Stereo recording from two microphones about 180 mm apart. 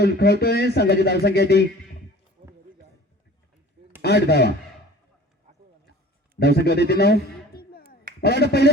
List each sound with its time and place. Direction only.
0.0 s speech: 60° left (ahead or behind)
2.4 s run: 55° right (ahead or behind)
4.0 s speech: 65° left (ahead or behind)
6.4 s a man's voice: 65° left (ahead or behind)